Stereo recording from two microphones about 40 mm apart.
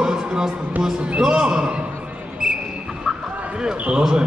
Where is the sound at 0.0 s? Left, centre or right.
Centre.